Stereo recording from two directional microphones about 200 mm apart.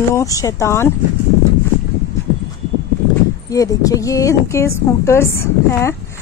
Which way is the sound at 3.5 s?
15° left (ahead or behind).